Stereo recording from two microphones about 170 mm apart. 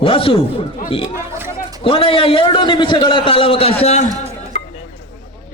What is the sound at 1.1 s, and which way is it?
Chatter, 15° right (ahead or behind).